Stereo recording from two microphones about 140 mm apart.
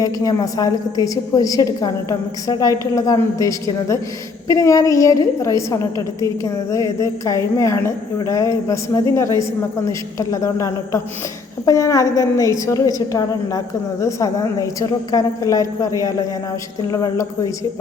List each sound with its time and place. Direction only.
0.0 s a woman's voice: 25° left (ahead or behind)